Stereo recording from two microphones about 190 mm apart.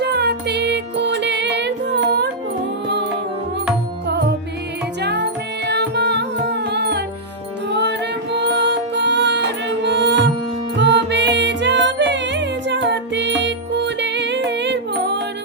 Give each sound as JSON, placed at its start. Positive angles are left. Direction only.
{"t": 0.0, "sound": "music", "side_deg": -60}
{"t": 5.0, "sound": "music", "side_deg": -60}